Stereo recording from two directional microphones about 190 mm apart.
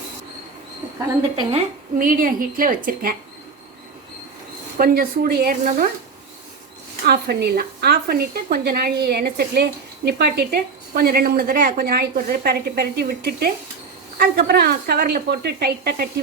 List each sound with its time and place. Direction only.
1.5 s a woman's voice: 45° right (ahead or behind)
4.8 s a woman's voice: 50° right (ahead or behind)
7.0 s a woman's voice: 55° right (ahead or behind)